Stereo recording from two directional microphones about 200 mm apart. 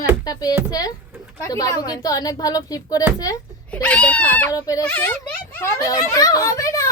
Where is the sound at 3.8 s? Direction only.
5° left (ahead or behind).